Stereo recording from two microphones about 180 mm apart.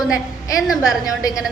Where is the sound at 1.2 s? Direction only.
20° left (ahead or behind).